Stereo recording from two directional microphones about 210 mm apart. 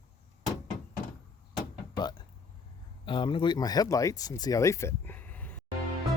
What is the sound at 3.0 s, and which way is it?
Speech, 25° left (ahead or behind).